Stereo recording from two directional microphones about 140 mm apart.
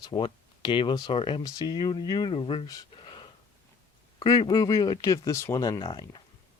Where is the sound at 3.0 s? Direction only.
35° left (ahead or behind).